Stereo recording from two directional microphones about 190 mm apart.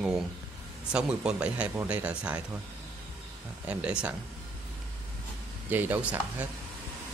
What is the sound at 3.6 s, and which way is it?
Speech, 5° right (ahead or behind).